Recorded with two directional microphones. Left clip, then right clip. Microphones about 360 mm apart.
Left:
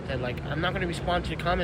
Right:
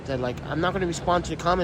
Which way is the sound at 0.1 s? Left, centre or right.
Centre.